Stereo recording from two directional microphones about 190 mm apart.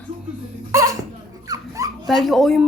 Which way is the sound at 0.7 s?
15° right (ahead or behind).